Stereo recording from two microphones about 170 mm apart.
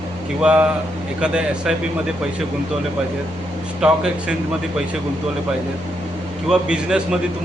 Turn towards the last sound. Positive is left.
turn(degrees=-5)  # may be behind; listen again after turning